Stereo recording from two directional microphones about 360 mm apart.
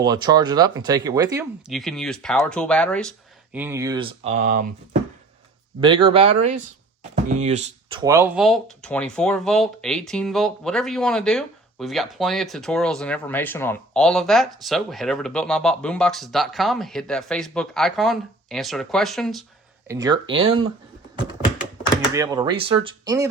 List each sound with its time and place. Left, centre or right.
0.0 s speech: centre
5.8 s speech: centre
19.9 s speech: centre
22.1 s speech: centre